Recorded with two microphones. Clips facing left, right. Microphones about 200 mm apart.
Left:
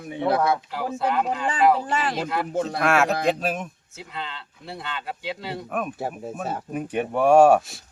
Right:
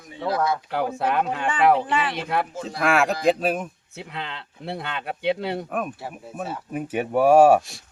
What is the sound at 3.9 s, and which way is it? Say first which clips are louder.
Speech: right 1 dB; 60° right (ahead or behind).